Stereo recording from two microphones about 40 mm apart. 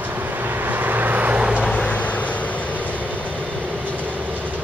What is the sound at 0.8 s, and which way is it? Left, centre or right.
Vehicle, right.